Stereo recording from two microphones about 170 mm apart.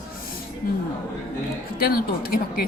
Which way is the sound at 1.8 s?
60° left (ahead or behind).